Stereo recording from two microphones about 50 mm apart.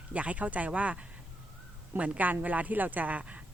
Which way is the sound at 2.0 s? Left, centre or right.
Right.